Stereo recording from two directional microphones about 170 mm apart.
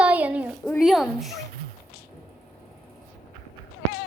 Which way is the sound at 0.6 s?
Centre (ahead or behind).